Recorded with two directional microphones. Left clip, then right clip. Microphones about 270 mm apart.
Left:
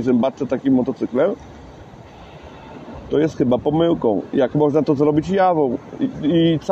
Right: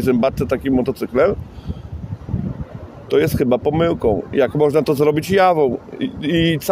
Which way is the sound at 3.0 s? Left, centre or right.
Right.